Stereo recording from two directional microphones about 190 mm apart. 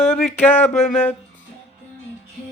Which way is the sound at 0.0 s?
Centre (ahead or behind).